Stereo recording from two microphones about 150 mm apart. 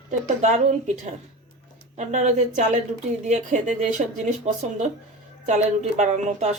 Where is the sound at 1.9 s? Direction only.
55° right (ahead or behind).